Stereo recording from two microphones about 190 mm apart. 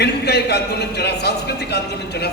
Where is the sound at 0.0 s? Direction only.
60° left (ahead or behind).